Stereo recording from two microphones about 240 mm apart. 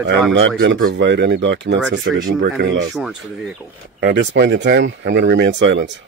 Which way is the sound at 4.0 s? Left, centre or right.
Right.